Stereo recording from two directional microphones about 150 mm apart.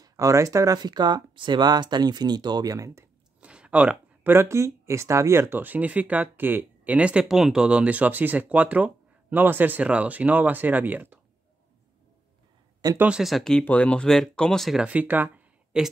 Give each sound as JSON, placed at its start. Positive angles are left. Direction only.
{"t": 0.0, "sound": "speech", "side_deg": -20}
{"t": 3.3, "sound": "speech", "side_deg": -5}
{"t": 12.9, "sound": "speech", "side_deg": -10}